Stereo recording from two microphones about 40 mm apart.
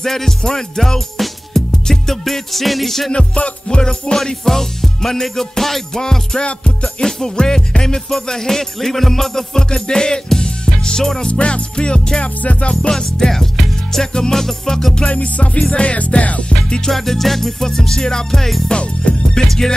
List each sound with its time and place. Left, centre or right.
0.0 s music: centre
3.1 s music: left
4.2 s music: centre
11.2 s music: left
12.9 s music: centre
15.0 s music: left
16.8 s music: centre
18.7 s music: left
19.4 s music: centre